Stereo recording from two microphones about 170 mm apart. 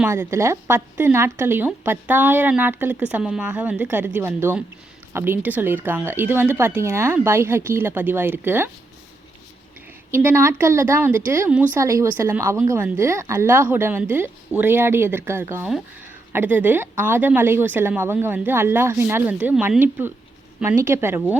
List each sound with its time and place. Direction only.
0.0 s speech: 15° right (ahead or behind)
10.1 s speech: 15° right (ahead or behind)